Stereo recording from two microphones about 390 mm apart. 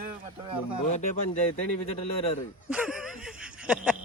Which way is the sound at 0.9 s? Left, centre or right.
Centre.